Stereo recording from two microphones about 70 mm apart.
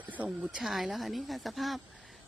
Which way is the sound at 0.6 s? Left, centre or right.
Centre.